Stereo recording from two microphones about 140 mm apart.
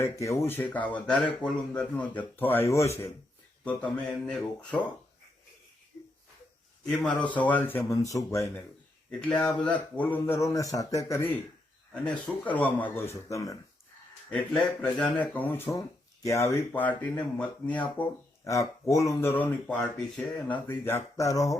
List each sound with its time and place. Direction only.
0.0 s speech: 20° left (ahead or behind)
3.6 s speech: 10° left (ahead or behind)
6.8 s speech: 5° left (ahead or behind); by 8.1 s 20° left (ahead or behind)
9.2 s speech: 10° left (ahead or behind)
13.1 s speech: 20° left (ahead or behind)
14.3 s speech: 10° left (ahead or behind)
18.4 s speech: 25° left (ahead or behind)